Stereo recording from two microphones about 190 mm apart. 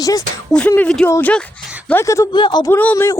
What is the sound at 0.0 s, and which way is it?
Speech, 20° left (ahead or behind).